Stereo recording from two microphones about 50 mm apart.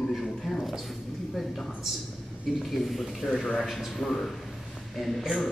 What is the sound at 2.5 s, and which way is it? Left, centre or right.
A man's voice, centre.